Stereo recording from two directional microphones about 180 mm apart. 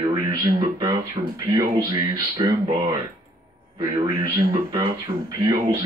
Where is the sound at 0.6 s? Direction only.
20° right (ahead or behind).